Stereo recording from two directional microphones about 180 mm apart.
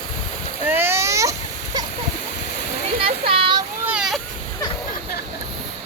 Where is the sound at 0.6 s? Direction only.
10° right (ahead or behind).